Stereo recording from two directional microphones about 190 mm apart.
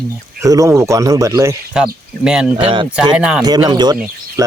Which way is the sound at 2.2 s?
5° right (ahead or behind).